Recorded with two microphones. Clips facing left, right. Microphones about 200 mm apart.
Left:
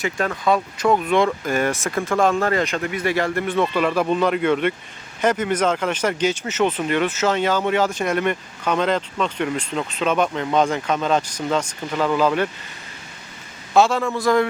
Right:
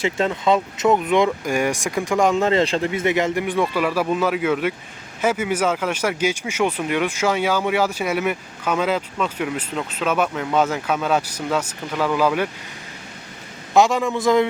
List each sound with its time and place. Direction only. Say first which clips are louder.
0.0 s speech: right 2 dB; 25° right (ahead or behind)
13.7 s speech: even; 15° right (ahead or behind)